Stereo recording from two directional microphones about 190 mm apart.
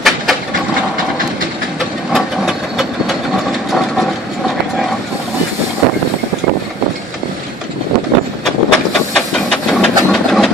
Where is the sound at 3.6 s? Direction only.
Centre (ahead or behind).